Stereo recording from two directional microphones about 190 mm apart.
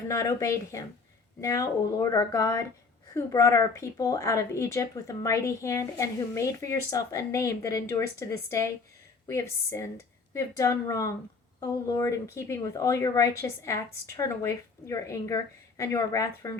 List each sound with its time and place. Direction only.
0.1 s a woman's voice: 15° left (ahead or behind)